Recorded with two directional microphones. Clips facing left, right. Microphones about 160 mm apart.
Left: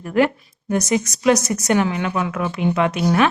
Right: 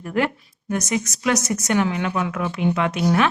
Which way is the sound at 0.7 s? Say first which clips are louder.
Left 4 dB; 30° left (ahead or behind).